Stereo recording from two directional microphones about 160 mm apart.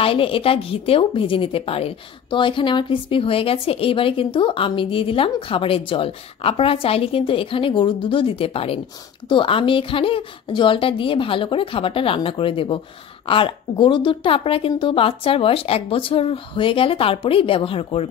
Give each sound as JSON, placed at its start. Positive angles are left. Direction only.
{"t": 0.0, "sound": "a woman's voice", "side_deg": 35}